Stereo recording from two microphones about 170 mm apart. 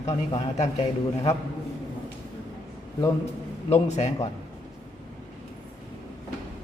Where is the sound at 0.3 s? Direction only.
25° left (ahead or behind).